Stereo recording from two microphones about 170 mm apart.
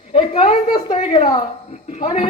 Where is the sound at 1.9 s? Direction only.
45° left (ahead or behind).